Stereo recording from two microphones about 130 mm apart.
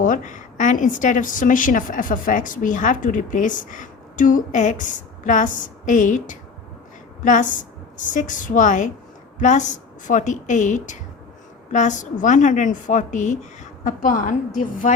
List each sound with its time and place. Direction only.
0.0 s a woman's voice: 90° left
7.9 s a woman's voice: 80° left
9.4 s a woman's voice: 70° left (ahead or behind)
13.8 s a woman's voice: 90° left